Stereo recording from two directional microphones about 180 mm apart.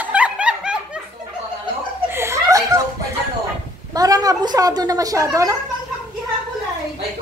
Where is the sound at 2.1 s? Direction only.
15° right (ahead or behind).